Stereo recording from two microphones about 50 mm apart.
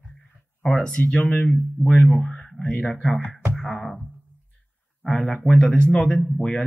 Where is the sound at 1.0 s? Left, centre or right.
Left.